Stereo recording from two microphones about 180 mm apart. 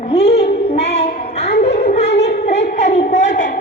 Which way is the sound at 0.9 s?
35° left (ahead or behind).